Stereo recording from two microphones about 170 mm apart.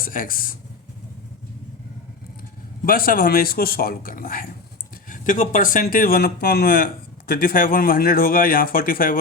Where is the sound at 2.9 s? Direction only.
60° left (ahead or behind).